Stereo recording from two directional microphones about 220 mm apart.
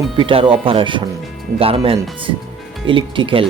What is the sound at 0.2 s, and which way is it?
Speech, 25° right (ahead or behind).